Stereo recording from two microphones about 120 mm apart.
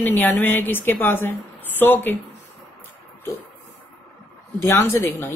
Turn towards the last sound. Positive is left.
turn(degrees=20)  # may be behind; listen again after turning